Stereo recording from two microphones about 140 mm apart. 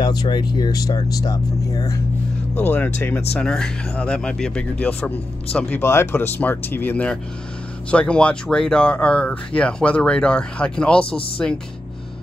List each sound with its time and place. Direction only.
0.0 s speech: 30° left (ahead or behind)
2.6 s speech: 15° left (ahead or behind)